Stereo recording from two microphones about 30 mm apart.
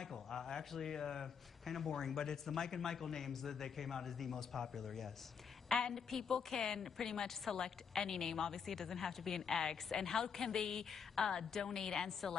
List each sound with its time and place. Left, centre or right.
0.0 s a man's voice: centre
5.7 s a woman's voice: left
5.9 s a man's voice: centre
6.3 s a woman's voice: left